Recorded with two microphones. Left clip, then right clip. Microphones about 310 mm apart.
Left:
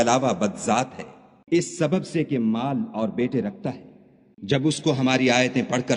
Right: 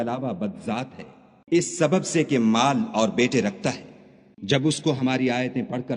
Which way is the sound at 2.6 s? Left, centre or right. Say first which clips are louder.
Right 5 dB; right.